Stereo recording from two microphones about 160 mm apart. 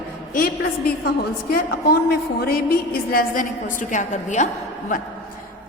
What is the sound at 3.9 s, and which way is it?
Speech, 50° left (ahead or behind).